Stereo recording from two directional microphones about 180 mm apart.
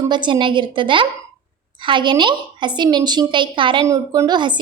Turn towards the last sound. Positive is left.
turn(degrees=-25)  # may be behind; listen again after turning